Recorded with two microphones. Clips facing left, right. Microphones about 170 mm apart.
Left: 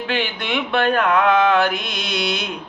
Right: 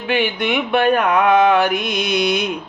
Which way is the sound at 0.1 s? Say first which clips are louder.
Right 6 dB; 15° right (ahead or behind).